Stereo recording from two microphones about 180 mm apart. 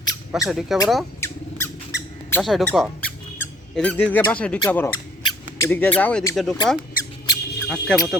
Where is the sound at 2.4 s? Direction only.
Centre (ahead or behind).